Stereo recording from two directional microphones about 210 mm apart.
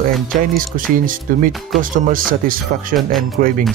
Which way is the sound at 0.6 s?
40° right (ahead or behind).